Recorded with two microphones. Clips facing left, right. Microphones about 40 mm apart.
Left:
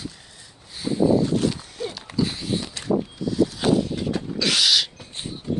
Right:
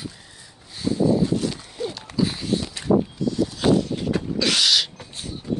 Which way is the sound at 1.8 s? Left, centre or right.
Centre.